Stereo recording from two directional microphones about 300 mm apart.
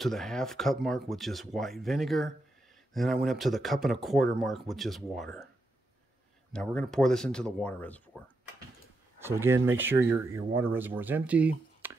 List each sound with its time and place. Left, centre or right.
0.0 s speech: centre
6.5 s speech: centre
9.2 s speech: centre